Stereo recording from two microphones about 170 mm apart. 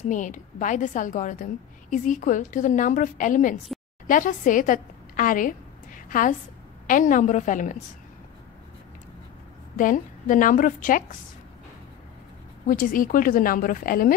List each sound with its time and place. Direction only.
0.1 s a woman's voice: 50° left (ahead or behind)
9.8 s a woman's voice: 50° left (ahead or behind)
12.6 s speech: 55° left (ahead or behind)